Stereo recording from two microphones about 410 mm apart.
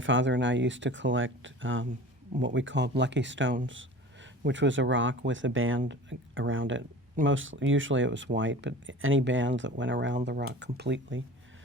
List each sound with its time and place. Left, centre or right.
0.0 s speech: right